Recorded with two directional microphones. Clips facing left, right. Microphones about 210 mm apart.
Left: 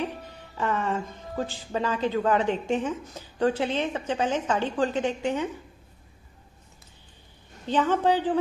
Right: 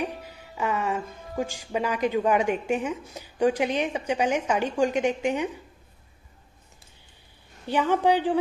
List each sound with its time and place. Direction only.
0.0 s speech: 10° right (ahead or behind)
7.6 s speech: 10° right (ahead or behind)